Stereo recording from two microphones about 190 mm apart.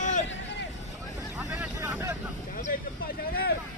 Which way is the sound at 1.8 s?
15° right (ahead or behind).